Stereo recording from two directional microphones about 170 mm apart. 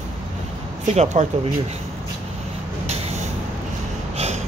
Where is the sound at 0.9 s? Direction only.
40° right (ahead or behind).